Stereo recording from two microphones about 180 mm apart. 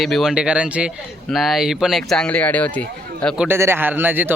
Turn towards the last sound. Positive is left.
turn(degrees=-10)  # may be behind; listen again after turning